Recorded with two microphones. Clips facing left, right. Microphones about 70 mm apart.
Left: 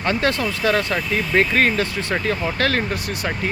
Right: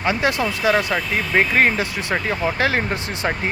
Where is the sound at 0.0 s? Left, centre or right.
Centre.